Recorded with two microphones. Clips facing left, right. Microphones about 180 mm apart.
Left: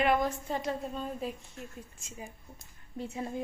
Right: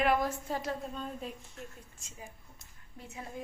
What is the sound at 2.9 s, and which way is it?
Speech, 30° left (ahead or behind).